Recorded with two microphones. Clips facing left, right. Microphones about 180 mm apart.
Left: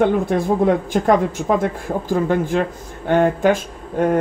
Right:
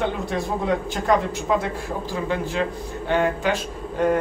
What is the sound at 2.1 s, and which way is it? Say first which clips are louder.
Speech: left 8 dB; 50° left (ahead or behind).